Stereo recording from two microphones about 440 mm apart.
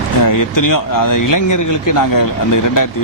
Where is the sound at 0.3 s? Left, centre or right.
Left.